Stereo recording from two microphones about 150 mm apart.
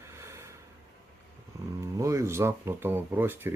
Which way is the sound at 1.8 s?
20° right (ahead or behind).